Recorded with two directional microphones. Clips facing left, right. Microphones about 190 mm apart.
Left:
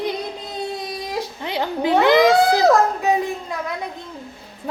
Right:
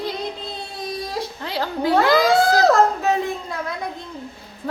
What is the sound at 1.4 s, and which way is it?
A child's voice, 20° left (ahead or behind).